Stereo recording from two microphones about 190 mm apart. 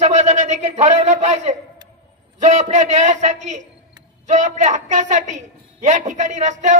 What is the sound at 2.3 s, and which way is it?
A woman's voice, 40° right (ahead or behind).